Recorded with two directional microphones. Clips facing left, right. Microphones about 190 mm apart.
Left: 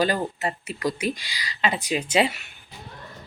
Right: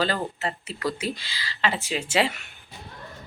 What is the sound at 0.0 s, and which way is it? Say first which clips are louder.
Speech: left 2 dB; 15° left (ahead or behind).